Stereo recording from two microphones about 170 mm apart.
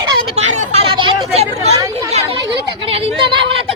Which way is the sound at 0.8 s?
30° right (ahead or behind).